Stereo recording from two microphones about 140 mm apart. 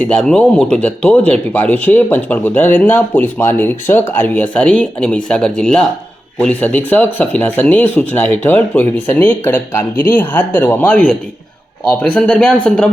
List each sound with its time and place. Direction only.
0.1 s speech: 5° left (ahead or behind)